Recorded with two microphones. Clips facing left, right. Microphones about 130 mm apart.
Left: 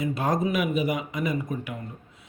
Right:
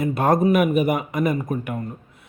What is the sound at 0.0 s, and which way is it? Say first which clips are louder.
A man's voice: right 7 dB; 55° right (ahead or behind).